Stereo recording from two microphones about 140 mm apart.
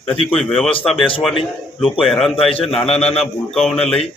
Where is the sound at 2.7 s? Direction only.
50° left (ahead or behind).